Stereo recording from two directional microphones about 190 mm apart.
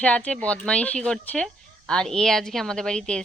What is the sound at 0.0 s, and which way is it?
A woman's voice, 5° left (ahead or behind).